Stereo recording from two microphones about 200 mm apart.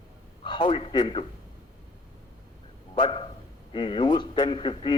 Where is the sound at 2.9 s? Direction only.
25° left (ahead or behind).